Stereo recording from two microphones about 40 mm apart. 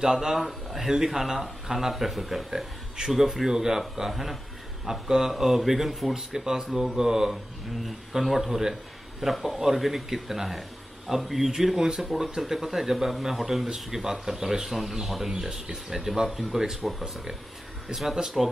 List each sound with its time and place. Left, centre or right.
0.0 s a man's voice: centre
7.8 s speech: centre